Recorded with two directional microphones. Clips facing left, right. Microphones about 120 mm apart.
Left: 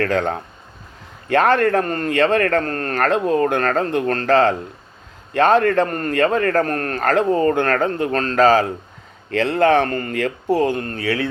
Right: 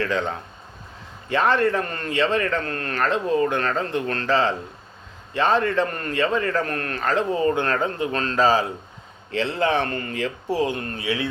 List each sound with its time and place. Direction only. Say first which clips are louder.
0.0 s a man's voice: left 5 dB; 55° left (ahead or behind)
1.8 s a man's voice: left 7 dB; 40° left (ahead or behind)
2.0 s speech: left 4 dB; 55° left (ahead or behind)
8.4 s a man's voice: left 5 dB; 60° left (ahead or behind)